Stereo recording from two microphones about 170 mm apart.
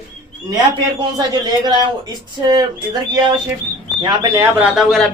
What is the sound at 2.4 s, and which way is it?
Speech, 25° right (ahead or behind).